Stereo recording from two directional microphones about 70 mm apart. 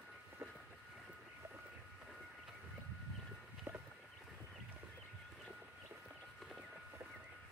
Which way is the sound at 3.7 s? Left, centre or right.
Right.